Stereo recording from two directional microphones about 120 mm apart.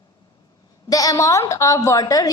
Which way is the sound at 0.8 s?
30° left (ahead or behind).